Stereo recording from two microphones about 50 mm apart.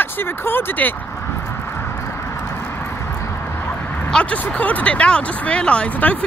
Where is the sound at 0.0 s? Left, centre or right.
Left.